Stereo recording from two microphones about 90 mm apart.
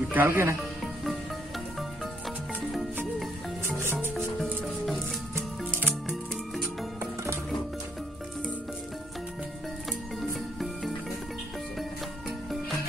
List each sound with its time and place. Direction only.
0.1 s speech: 25° right (ahead or behind)
1.8 s music: centre (ahead or behind)
5.7 s music: 20° right (ahead or behind)